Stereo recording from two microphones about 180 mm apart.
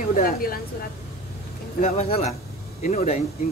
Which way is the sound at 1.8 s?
35° left (ahead or behind).